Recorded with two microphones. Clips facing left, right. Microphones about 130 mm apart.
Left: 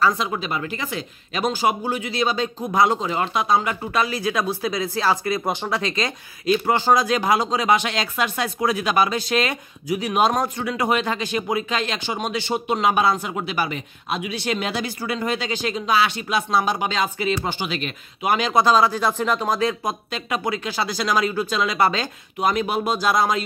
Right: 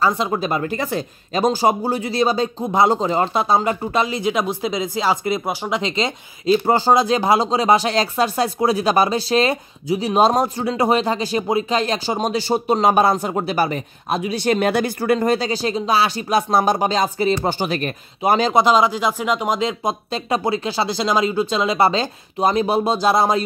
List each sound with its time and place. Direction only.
0.0 s speech: 30° right (ahead or behind)
18.5 s speech: 20° right (ahead or behind)